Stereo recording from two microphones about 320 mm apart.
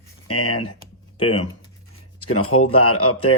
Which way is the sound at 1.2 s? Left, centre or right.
Centre.